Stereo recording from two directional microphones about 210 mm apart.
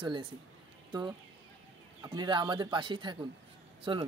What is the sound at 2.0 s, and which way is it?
Speech, 20° right (ahead or behind).